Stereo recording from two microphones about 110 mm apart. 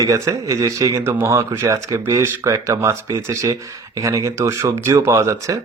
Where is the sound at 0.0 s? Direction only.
30° right (ahead or behind).